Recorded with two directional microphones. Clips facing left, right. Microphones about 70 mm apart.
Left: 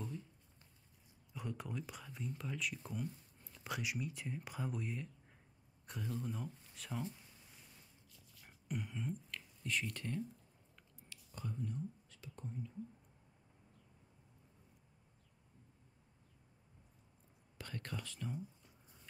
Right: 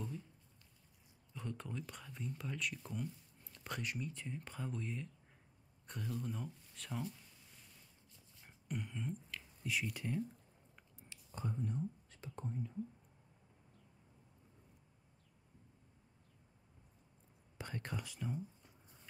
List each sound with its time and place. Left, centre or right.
1.3 s speech: centre
8.5 s a sound: centre
9.6 s speech: centre
10.8 s whispering: right
17.6 s speech: centre